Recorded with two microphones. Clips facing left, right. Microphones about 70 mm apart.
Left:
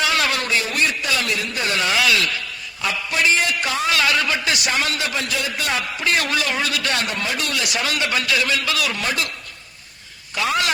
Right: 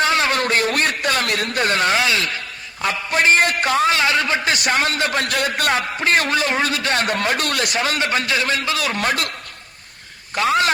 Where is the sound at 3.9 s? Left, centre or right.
Right.